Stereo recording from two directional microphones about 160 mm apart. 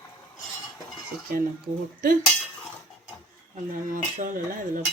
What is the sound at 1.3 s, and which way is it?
Speech, 65° right (ahead or behind).